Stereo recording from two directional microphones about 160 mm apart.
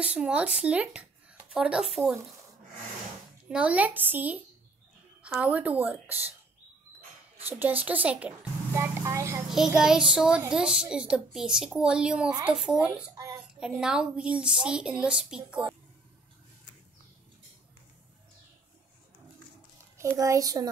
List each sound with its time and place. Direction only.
0.0 s a woman's voice: 5° right (ahead or behind)
3.4 s speech: 5° right (ahead or behind)
5.4 s speech: 10° right (ahead or behind)
7.4 s speech: 10° right (ahead or behind)
9.5 s a woman's voice: 5° right (ahead or behind)
13.1 s a sound: 20° right (ahead or behind)
13.6 s a woman's voice: 5° right (ahead or behind)
20.2 s a child's voice: 20° right (ahead or behind)